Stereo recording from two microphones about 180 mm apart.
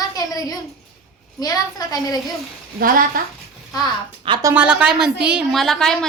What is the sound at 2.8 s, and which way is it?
Speech, 50° right (ahead or behind).